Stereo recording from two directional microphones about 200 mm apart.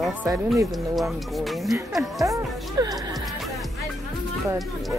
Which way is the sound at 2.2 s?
15° right (ahead or behind).